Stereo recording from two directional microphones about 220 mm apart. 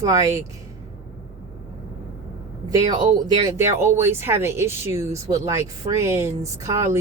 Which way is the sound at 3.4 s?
10° right (ahead or behind).